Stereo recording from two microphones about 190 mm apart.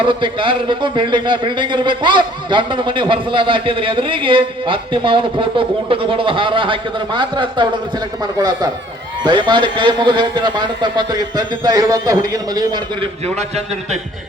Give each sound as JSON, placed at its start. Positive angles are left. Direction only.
{"t": 0.0, "sound": "a man's voice", "side_deg": -25}
{"t": 9.2, "sound": "a man's voice", "side_deg": -25}